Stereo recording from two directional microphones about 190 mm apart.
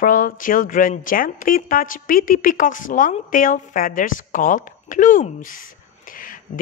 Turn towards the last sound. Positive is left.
turn(degrees=45)  # may be behind; listen again after turning